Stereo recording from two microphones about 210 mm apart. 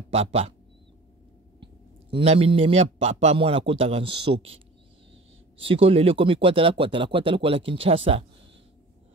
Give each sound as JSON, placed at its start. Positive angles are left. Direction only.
{"t": 0.1, "sound": "speech", "side_deg": -30}
{"t": 1.6, "sound": "a man's voice", "side_deg": -25}
{"t": 5.6, "sound": "speech", "side_deg": -25}